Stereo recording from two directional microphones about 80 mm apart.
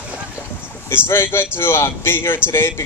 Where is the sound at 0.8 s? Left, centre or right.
Left.